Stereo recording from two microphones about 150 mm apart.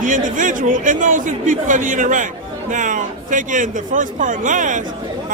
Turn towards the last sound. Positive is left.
turn(degrees=-60)  # may be behind; listen again after turning